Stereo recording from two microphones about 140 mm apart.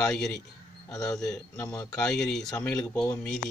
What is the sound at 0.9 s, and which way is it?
Speech, 25° left (ahead or behind).